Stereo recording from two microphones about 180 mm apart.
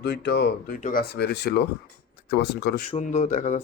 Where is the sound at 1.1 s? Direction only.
70° left (ahead or behind).